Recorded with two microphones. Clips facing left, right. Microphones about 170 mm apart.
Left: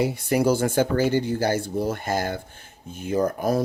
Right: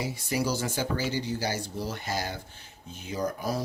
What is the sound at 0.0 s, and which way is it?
Speech, 60° left (ahead or behind).